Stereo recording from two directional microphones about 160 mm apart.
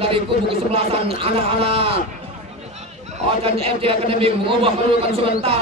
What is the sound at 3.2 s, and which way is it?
A man's voice, 35° right (ahead or behind).